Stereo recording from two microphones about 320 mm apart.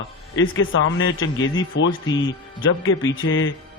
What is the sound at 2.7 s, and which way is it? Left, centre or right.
Speech, left.